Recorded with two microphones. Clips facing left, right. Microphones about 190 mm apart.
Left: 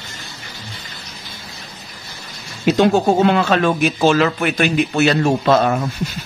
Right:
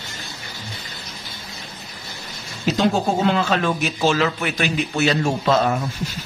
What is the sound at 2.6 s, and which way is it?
Speech, 60° left (ahead or behind).